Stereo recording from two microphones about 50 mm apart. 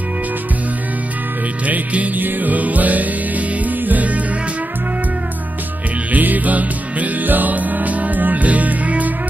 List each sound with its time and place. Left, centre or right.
1.7 s music: right
6.1 s music: right